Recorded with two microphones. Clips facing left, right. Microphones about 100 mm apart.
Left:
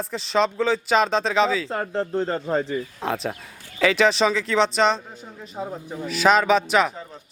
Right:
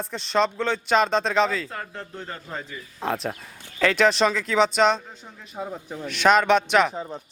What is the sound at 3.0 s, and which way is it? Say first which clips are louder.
A man's voice: left 1 dB; centre (ahead or behind).